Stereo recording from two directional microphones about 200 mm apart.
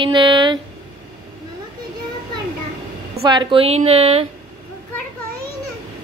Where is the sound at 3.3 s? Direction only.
25° right (ahead or behind).